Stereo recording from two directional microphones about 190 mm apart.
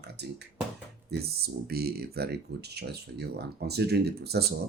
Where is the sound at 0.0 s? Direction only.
60° right (ahead or behind).